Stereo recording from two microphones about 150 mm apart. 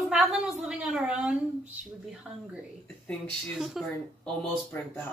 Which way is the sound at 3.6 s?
Centre (ahead or behind).